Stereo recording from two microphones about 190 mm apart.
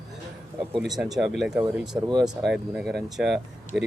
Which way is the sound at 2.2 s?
Centre (ahead or behind).